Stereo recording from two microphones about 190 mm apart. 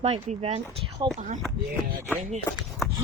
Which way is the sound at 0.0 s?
35° right (ahead or behind).